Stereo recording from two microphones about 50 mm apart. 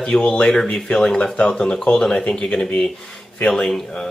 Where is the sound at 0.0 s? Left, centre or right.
Left.